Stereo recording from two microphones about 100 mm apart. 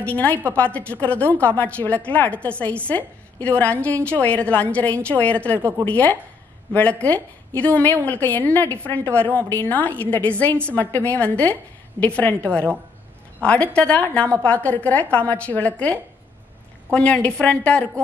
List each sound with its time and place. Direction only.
0.0 s a woman's voice: 15° left (ahead or behind)
5.6 s a woman's voice: 25° right (ahead or behind)
5.9 s a woman's voice: 15° left (ahead or behind)